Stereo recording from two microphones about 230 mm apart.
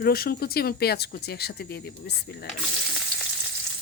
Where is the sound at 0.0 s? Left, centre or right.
Left.